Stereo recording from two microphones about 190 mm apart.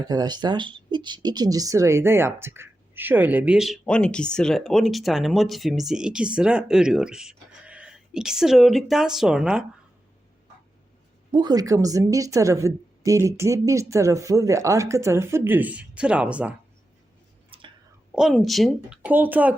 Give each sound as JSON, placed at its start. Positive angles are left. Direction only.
{"t": 0.0, "sound": "speech", "side_deg": -20}
{"t": 11.3, "sound": "a woman's voice", "side_deg": -20}
{"t": 17.5, "sound": "whispering", "side_deg": -30}
{"t": 18.1, "sound": "speech", "side_deg": 0}